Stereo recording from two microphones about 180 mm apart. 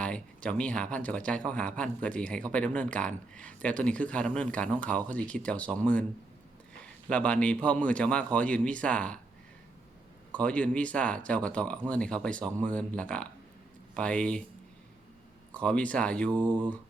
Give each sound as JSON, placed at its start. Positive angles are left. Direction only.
{"t": 0.0, "sound": "speech", "side_deg": 5}
{"t": 7.1, "sound": "speech", "side_deg": 5}
{"t": 10.3, "sound": "speech", "side_deg": 5}
{"t": 15.5, "sound": "speech", "side_deg": 5}
{"t": 16.3, "sound": "mantra", "side_deg": -25}